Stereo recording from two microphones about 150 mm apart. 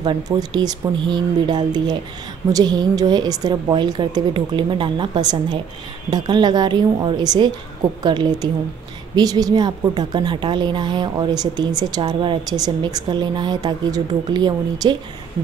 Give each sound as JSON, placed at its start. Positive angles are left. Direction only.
{"t": 0.0, "sound": "a woman's voice", "side_deg": -30}